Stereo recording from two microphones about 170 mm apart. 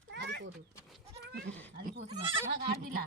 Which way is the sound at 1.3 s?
80° right.